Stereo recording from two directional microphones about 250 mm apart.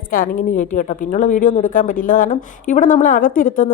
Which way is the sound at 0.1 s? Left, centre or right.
Left.